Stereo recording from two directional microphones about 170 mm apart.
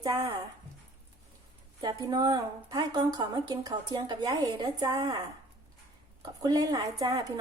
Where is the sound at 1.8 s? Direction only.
25° right (ahead or behind).